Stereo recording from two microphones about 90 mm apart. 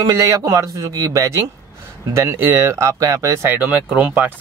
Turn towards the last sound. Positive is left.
turn(degrees=-20)  # may be behind; listen again after turning